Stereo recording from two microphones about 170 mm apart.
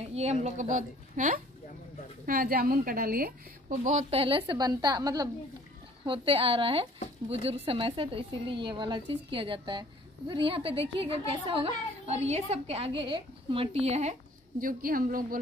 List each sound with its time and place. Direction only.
0.1 s a woman's voice: 40° right (ahead or behind)
2.2 s a woman's voice: 60° right (ahead or behind); by 14.1 s 40° right (ahead or behind)
14.6 s a woman's voice: 55° right (ahead or behind)